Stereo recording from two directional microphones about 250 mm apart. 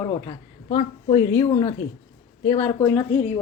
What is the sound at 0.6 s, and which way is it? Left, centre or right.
A woman's voice, left.